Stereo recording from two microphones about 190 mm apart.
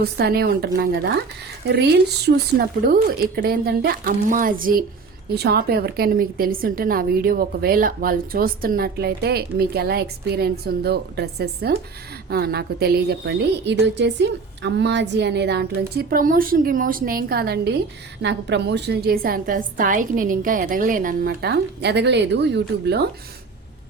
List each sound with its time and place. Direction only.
0.0 s a woman's voice: 55° right (ahead or behind)